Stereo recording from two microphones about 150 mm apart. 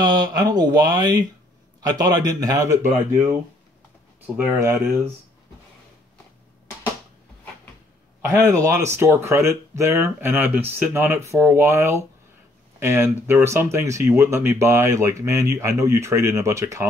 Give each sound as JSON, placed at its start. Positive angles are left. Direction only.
{"t": 0.0, "sound": "speech", "side_deg": -25}
{"t": 4.4, "sound": "speech", "side_deg": -20}
{"t": 8.2, "sound": "speech", "side_deg": -20}